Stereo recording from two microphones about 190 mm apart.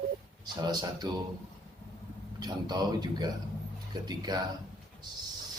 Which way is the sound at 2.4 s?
20° right (ahead or behind).